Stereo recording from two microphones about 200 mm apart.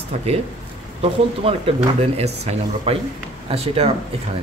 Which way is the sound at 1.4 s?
30° right (ahead or behind).